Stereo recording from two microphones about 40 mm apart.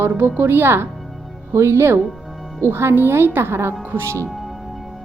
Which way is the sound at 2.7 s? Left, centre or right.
Right.